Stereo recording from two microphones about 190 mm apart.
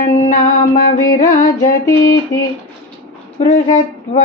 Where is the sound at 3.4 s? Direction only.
40° left (ahead or behind).